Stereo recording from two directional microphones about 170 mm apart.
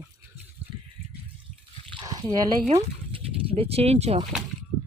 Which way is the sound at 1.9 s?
20° right (ahead or behind).